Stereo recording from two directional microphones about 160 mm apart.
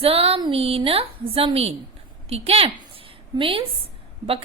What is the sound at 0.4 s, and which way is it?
A woman's voice, 35° right (ahead or behind).